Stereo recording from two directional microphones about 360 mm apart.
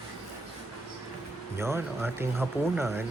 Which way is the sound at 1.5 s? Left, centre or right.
Centre.